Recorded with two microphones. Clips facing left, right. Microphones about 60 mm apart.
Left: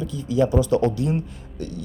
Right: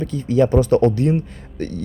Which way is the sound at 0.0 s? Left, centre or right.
Right.